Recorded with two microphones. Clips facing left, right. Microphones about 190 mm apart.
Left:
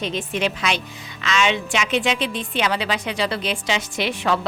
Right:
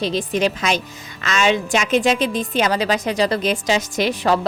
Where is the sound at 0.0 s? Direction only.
35° right (ahead or behind).